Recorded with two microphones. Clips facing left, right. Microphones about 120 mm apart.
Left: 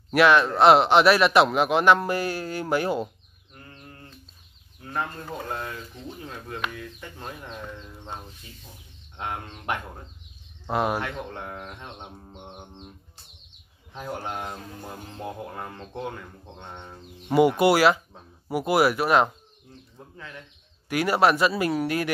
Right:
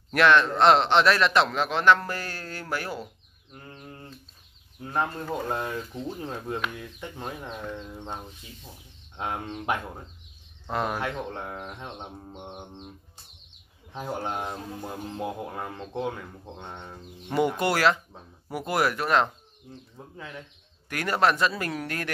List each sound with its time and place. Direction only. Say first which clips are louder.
0.1 s speech: left 2 dB; 5° left (ahead or behind)
3.6 s a sound: right 3 dB; 20° right (ahead or behind)
5.3 s speech: right 3 dB; 20° right (ahead or behind)
9.1 s speech: right 2 dB; 10° right (ahead or behind)
10.7 s speech: left 4 dB; 10° left (ahead or behind)
11.0 s speech: right 1 dB; 5° right (ahead or behind)
13.9 s speech: right 1 dB; 15° right (ahead or behind)
17.4 s speech: left 5 dB; 10° left (ahead or behind)
20.2 s speech: right 2 dB; 10° right (ahead or behind)
20.9 s speech: left 3 dB; 10° left (ahead or behind)